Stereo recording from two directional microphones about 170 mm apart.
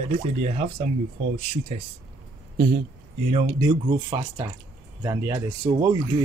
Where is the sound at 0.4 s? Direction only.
45° right (ahead or behind).